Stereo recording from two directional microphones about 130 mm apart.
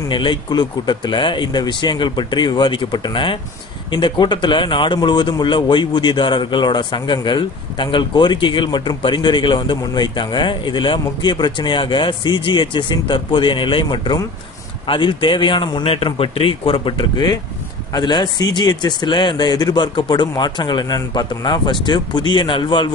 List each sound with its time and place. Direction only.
0.1 s speech: 35° left (ahead or behind)